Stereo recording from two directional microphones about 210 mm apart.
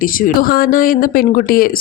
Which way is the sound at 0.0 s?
40° left (ahead or behind).